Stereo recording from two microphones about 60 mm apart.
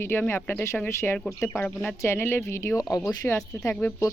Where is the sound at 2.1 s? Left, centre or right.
Left.